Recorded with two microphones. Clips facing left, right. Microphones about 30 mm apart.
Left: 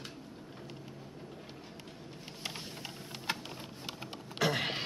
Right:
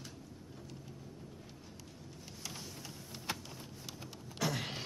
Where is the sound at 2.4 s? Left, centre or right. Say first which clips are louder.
Left 5 dB; left.